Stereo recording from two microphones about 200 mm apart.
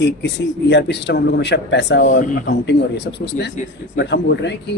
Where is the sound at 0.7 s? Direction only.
60° left (ahead or behind).